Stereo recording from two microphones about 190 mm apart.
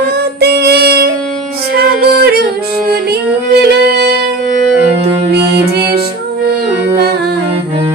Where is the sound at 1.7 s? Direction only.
55° right (ahead or behind).